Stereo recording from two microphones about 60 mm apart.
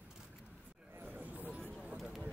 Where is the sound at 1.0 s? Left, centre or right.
Right.